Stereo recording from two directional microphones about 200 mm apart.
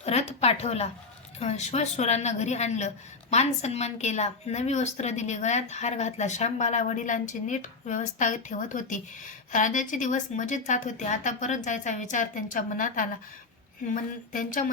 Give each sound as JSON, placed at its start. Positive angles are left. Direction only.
{"t": 0.0, "sound": "speech", "side_deg": 35}